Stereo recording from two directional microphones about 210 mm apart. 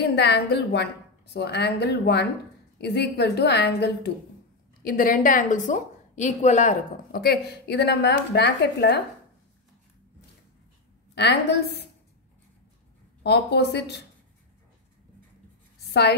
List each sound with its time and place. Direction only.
0.0 s a woman's voice: 50° left (ahead or behind)
11.1 s a woman's voice: 50° left (ahead or behind)
13.2 s a woman's voice: 50° left (ahead or behind)
15.9 s a woman's voice: 55° left (ahead or behind)